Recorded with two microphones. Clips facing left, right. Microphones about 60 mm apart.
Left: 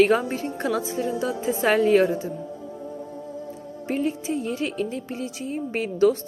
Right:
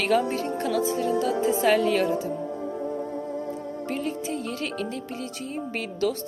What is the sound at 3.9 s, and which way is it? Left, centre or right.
Speech, left.